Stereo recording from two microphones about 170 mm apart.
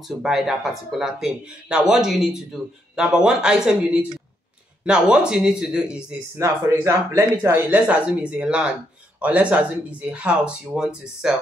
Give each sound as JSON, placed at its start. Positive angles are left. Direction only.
{"t": 0.0, "sound": "speech", "side_deg": 0}
{"t": 6.4, "sound": "speech", "side_deg": -20}